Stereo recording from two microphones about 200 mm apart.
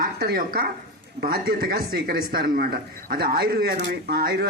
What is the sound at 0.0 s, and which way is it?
Speech, 50° right (ahead or behind).